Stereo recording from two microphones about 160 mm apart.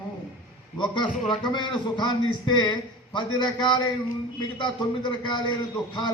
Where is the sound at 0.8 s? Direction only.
30° left (ahead or behind).